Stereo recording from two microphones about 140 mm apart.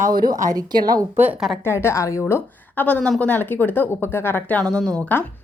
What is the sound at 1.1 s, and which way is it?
Speech, 15° right (ahead or behind).